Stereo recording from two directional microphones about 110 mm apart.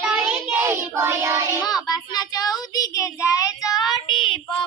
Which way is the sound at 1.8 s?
35° left (ahead or behind).